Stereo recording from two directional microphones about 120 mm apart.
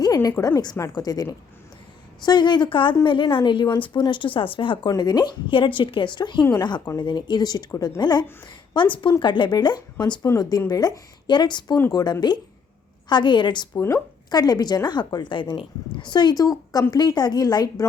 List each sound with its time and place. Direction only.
0.0 s a woman's voice: 30° left (ahead or behind)